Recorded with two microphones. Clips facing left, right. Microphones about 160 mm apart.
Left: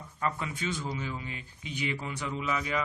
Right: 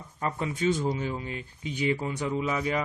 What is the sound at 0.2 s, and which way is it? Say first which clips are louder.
Speech: right 4 dB; 35° right (ahead or behind).